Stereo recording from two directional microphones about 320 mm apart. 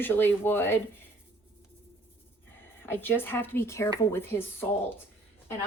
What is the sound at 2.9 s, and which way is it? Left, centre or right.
Speech, centre.